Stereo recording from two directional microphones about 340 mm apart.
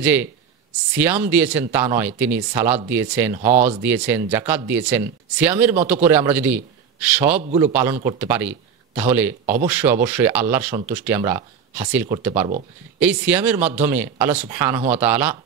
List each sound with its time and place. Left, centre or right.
0.0 s a man's voice: centre
3.4 s speech: right
3.8 s a man's voice: centre